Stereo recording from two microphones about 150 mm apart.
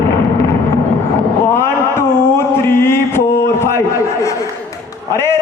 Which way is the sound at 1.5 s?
15° left (ahead or behind).